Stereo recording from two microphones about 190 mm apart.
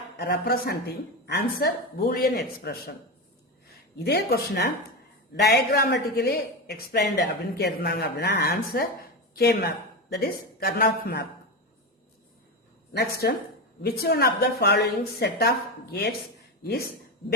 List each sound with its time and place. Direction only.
0.2 s a woman's voice: 55° left (ahead or behind)
4.0 s a woman's voice: 60° left (ahead or behind)
12.9 s a woman's voice: 60° left (ahead or behind)